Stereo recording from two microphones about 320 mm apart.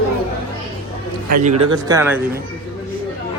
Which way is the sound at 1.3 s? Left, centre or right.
Right.